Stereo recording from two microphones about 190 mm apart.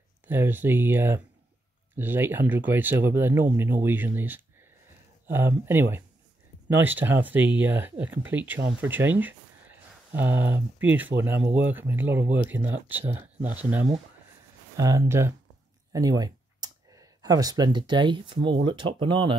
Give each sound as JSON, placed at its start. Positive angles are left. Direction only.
{"t": 0.3, "sound": "speech", "side_deg": -10}